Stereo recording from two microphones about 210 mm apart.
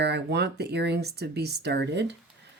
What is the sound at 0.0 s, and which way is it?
Speech, 55° right (ahead or behind).